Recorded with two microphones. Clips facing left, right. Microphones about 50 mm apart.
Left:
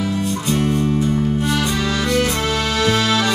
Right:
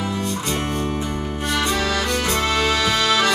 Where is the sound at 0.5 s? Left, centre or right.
Right.